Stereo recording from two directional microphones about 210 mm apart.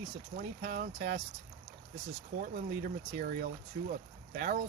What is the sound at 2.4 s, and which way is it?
Speech, 45° right (ahead or behind).